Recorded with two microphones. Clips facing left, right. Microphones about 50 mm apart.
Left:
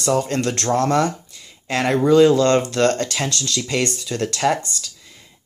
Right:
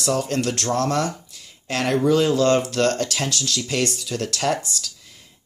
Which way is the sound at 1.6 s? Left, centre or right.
Left.